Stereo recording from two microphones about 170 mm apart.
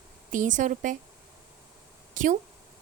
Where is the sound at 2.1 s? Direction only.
50° right (ahead or behind).